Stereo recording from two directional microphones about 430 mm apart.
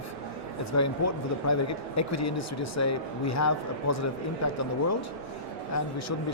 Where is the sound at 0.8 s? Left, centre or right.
Left.